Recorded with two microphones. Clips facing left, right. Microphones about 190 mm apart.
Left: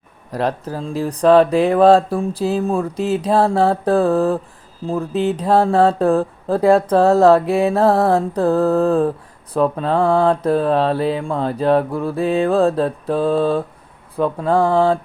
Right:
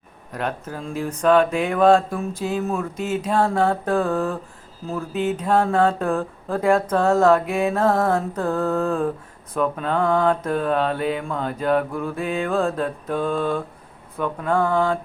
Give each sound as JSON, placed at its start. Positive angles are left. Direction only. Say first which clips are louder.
{"t": 0.3, "sound": "speech", "louder": "left 6 dB", "side_deg": 35}